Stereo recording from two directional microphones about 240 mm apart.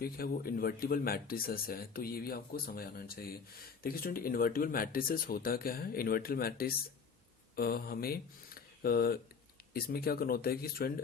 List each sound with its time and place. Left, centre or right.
0.0 s speech: left